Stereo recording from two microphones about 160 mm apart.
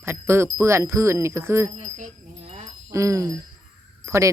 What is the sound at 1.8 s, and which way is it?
Jingle bell, 50° right (ahead or behind).